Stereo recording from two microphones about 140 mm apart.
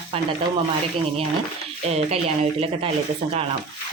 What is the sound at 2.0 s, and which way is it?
Speech, 50° right (ahead or behind).